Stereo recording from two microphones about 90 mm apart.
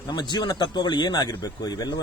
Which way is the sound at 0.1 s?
50° left (ahead or behind).